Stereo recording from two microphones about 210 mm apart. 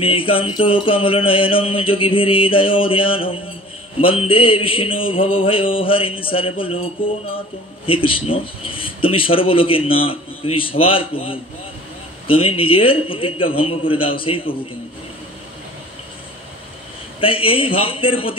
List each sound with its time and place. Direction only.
0.0 s speech: 25° left (ahead or behind)
17.2 s speech: 25° left (ahead or behind)